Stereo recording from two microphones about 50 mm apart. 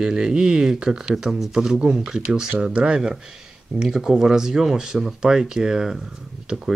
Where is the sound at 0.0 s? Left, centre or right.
Centre.